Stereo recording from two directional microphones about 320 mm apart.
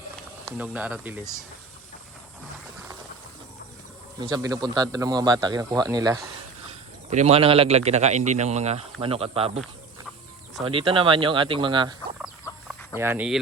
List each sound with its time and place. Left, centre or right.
0.5 s speech: centre
4.2 s a man's voice: centre
10.6 s a man's voice: centre
12.2 s chicken: centre